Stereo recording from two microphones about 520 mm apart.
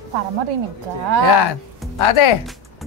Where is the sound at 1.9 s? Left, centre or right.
Left.